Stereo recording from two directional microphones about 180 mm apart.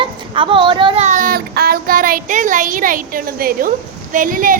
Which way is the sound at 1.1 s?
50° right (ahead or behind).